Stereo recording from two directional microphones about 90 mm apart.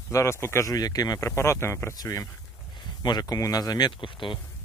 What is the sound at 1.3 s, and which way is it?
Speech, 30° left (ahead or behind).